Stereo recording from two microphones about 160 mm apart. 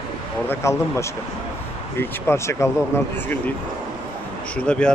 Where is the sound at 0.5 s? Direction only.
15° left (ahead or behind).